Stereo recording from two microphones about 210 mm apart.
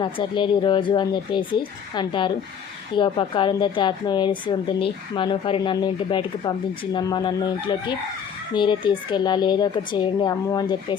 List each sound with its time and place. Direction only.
0.0 s a woman's voice: 25° left (ahead or behind)